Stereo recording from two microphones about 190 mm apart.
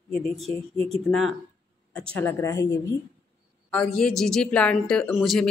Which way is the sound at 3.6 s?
5° left (ahead or behind).